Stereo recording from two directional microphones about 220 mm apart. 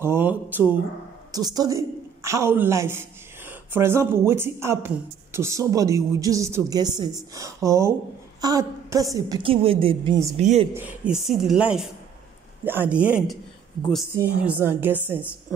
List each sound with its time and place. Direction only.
0.0 s a woman's voice: 10° right (ahead or behind); by 10.7 s 30° right (ahead or behind)
10.7 s a woman's voice: 5° right (ahead or behind)